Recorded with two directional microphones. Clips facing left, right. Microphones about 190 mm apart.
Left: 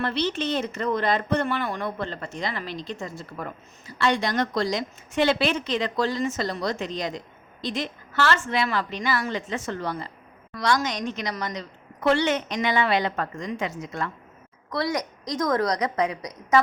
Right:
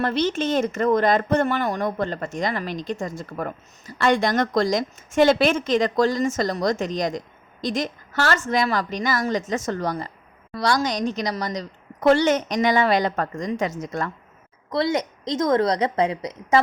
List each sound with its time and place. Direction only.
0.0 s a woman's voice: 45° right (ahead or behind)
14.7 s a woman's voice: 25° right (ahead or behind)